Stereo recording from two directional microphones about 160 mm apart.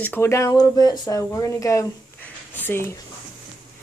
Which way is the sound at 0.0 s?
15° left (ahead or behind).